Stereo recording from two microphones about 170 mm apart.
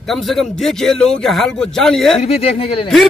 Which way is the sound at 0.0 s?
Centre (ahead or behind).